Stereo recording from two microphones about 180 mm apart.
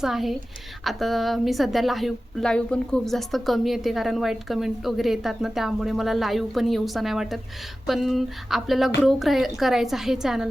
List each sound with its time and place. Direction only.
0.0 s a woman's voice: centre (ahead or behind)